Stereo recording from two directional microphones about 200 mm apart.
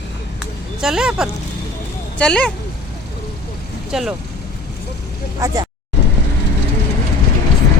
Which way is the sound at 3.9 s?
Centre (ahead or behind).